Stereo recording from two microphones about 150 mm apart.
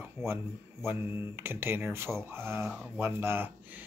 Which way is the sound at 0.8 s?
15° right (ahead or behind).